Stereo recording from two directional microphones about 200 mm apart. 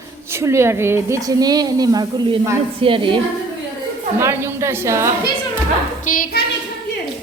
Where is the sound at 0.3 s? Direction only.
15° right (ahead or behind).